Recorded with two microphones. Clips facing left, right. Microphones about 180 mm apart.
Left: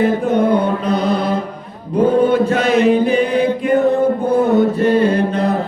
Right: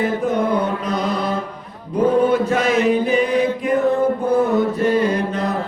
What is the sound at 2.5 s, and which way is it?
Chant, 70° left (ahead or behind).